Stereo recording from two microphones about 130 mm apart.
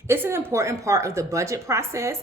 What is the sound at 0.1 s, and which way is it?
A woman's voice, 20° right (ahead or behind).